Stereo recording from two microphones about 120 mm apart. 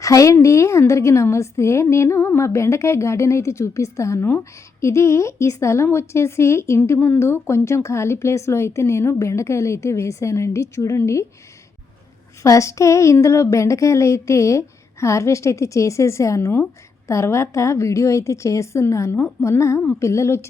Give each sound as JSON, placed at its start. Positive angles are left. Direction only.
{"t": 0.0, "sound": "a woman's voice", "side_deg": 25}
{"t": 12.4, "sound": "a woman's voice", "side_deg": 25}